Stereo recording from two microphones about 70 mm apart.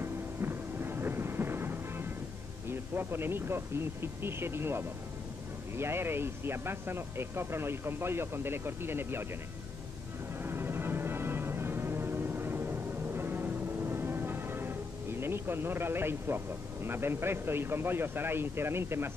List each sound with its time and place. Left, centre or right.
0.0 s music: right
2.7 s speech: right
10.4 s music: right